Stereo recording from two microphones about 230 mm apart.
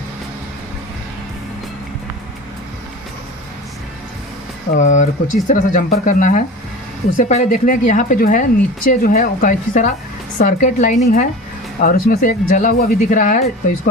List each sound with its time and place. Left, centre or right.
4.7 s speech: left